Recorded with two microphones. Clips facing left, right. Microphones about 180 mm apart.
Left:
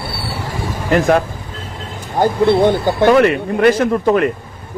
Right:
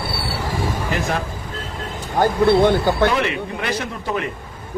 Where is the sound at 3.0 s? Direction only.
50° left (ahead or behind).